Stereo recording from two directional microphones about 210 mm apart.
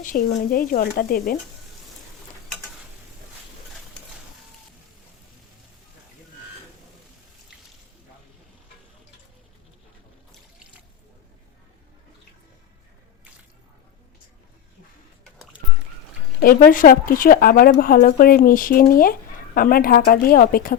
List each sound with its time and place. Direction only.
0.0 s a woman's voice: 40° left (ahead or behind)
16.4 s a woman's voice: 40° left (ahead or behind)